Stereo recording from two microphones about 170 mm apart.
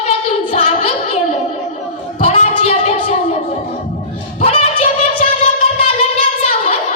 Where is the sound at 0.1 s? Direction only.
40° left (ahead or behind).